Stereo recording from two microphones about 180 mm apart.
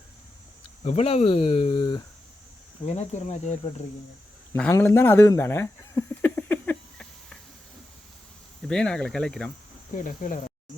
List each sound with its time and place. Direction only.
0.9 s speech: 35° left (ahead or behind)
2.8 s speech: 40° left (ahead or behind)
4.5 s a sound: 10° left (ahead or behind)
8.6 s speech: 5° left (ahead or behind)
9.9 s speech: 45° left (ahead or behind)